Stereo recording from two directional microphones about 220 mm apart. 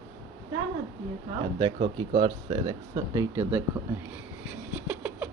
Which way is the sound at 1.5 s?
20° right (ahead or behind).